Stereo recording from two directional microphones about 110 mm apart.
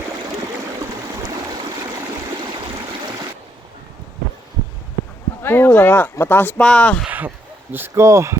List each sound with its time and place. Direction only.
5.4 s speech: 20° left (ahead or behind)
7.1 s speech: 15° right (ahead or behind)